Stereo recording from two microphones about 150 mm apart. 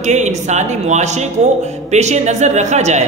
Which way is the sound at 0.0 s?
50° right (ahead or behind).